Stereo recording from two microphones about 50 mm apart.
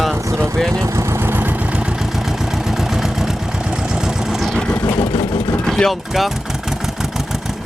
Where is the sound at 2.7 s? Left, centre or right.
Centre.